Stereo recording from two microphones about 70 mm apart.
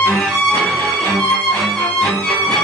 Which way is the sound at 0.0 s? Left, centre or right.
Centre.